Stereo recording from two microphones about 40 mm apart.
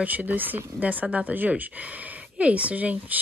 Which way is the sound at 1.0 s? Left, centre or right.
Right.